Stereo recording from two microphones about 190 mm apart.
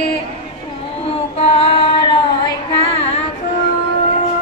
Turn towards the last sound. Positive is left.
turn(degrees=30)  # may be behind; listen again after turning